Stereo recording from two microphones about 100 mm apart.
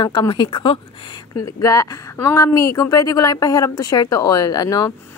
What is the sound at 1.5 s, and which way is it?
A woman's voice, 35° left (ahead or behind).